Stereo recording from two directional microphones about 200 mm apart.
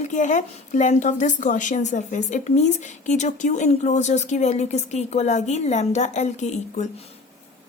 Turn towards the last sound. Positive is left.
turn(degrees=35)  # may be behind; listen again after turning